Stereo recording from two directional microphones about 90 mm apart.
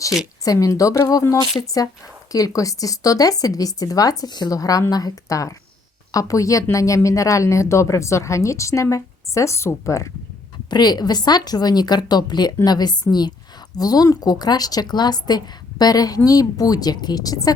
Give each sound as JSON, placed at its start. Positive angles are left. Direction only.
{"t": 0.4, "sound": "speech", "side_deg": 40}
{"t": 2.3, "sound": "speech", "side_deg": 40}
{"t": 10.7, "sound": "speech", "side_deg": 50}